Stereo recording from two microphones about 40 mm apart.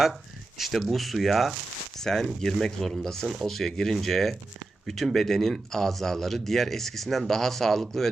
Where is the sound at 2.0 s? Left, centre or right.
Centre.